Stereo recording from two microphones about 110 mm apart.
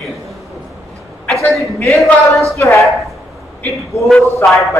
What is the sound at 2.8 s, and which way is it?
Speech, centre (ahead or behind).